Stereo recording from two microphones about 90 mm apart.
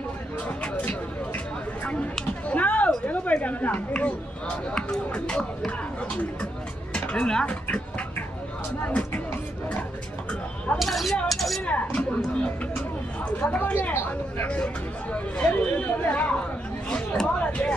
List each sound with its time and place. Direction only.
1.9 s a sound: 15° left (ahead or behind)
4.7 s speech: 10° left (ahead or behind)
6.9 s speech: 10° left (ahead or behind)
8.8 s speech: 15° left (ahead or behind)
10.8 s speech: centre (ahead or behind)
11.2 s cutlery: centre (ahead or behind)
11.6 s dishes: 15° left (ahead or behind)
13.4 s chatter: 20° left (ahead or behind)
15.3 s speech: 15° left (ahead or behind)
16.9 s a sound: 15° left (ahead or behind)